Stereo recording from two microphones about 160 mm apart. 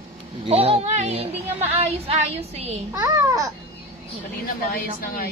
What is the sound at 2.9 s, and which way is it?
Babbling, 20° right (ahead or behind).